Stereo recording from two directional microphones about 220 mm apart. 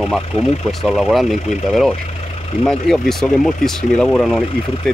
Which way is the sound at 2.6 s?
Centre (ahead or behind).